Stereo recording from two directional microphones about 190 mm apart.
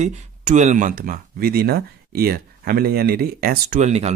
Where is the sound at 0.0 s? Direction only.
40° right (ahead or behind).